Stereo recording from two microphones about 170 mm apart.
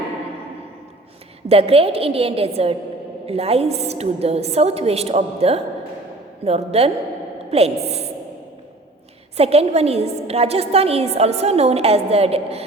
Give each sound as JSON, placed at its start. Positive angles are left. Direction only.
{"t": 1.5, "sound": "a woman's voice", "side_deg": -35}
{"t": 9.4, "sound": "a woman's voice", "side_deg": -35}